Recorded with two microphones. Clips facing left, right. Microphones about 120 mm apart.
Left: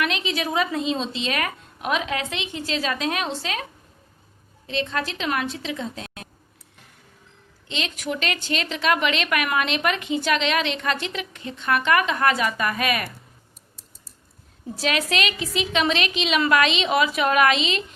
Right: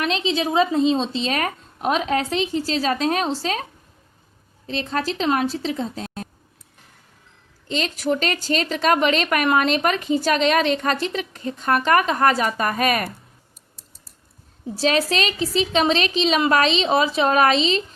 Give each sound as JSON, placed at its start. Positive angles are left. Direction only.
{"t": 0.0, "sound": "a woman's voice", "side_deg": -30}
{"t": 7.7, "sound": "a woman's voice", "side_deg": -35}
{"t": 14.8, "sound": "a woman's voice", "side_deg": -35}